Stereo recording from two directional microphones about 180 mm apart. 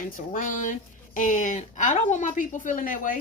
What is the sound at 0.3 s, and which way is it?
A woman's voice, 45° left (ahead or behind).